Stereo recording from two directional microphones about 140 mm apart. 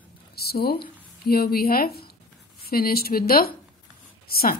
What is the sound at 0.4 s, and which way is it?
Speech, 90° left.